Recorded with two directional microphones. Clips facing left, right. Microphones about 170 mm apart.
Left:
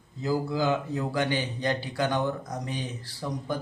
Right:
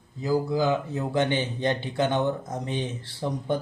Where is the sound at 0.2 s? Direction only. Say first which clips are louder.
Right 3 dB; 15° right (ahead or behind).